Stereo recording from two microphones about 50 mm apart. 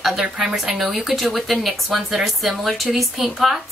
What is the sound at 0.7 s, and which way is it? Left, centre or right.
A woman's voice, centre.